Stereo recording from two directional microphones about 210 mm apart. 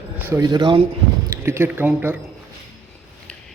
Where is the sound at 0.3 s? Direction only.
15° right (ahead or behind).